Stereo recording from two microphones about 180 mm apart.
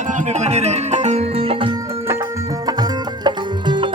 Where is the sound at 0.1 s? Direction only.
40° right (ahead or behind).